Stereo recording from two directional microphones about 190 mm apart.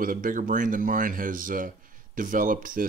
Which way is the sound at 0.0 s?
45° right (ahead or behind).